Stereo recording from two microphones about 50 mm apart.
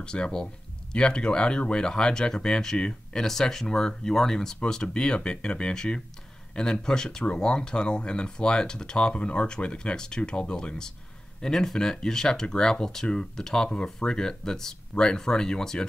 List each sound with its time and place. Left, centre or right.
0.0 s speech: centre